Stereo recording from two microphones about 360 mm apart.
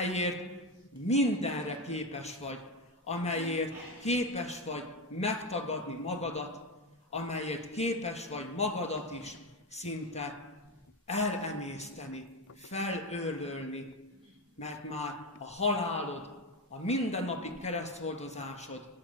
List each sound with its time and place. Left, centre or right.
0.0 s mantra: centre
1.0 s a man's voice: centre
14.6 s a man's voice: centre